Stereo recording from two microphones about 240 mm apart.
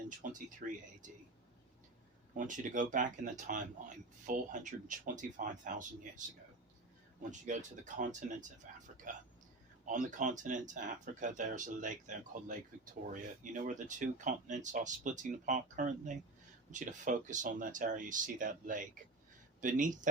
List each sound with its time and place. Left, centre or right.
0.1 s speech: right
2.3 s speech: right